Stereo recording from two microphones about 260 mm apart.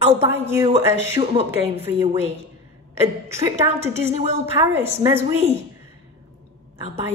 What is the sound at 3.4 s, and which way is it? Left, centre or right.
Speech, centre.